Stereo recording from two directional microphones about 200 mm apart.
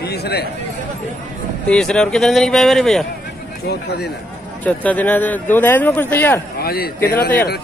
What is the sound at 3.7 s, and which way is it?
Speech, 55° left (ahead or behind).